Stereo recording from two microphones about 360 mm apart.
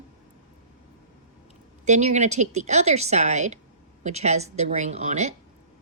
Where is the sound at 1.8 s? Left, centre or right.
Centre.